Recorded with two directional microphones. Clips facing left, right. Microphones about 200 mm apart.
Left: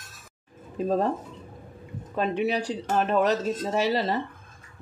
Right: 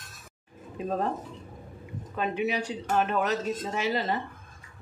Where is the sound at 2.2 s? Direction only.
35° left (ahead or behind).